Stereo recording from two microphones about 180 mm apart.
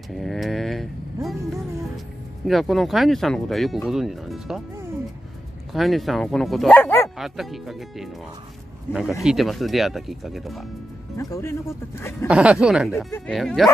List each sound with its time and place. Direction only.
0.1 s a sound: centre (ahead or behind)
2.4 s speech: centre (ahead or behind)
5.7 s speech: centre (ahead or behind)
7.2 s speech: centre (ahead or behind)
8.9 s a man's voice: 10° left (ahead or behind)
9.2 s speech: centre (ahead or behind)
11.1 s a man's voice: 15° left (ahead or behind)
12.3 s speech: 5° right (ahead or behind)